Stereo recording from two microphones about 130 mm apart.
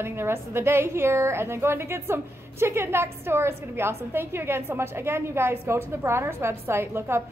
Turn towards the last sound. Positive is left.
turn(degrees=-20)  # may be behind; listen again after turning